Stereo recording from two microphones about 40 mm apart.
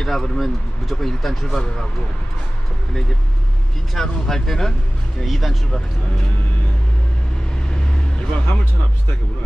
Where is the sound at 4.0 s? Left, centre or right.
Centre.